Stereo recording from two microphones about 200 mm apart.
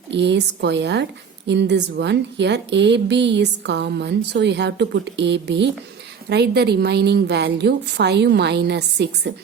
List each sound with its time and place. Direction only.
0.1 s a woman's voice: 60° right (ahead or behind)